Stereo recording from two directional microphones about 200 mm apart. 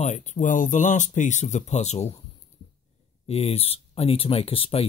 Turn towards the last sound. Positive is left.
turn(degrees=30)  # may be behind; listen again after turning